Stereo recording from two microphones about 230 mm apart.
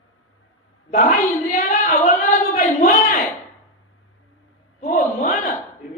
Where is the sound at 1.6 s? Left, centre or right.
Left.